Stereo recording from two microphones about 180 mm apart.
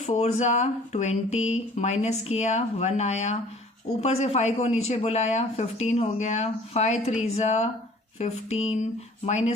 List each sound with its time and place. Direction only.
0.0 s speech: 40° left (ahead or behind)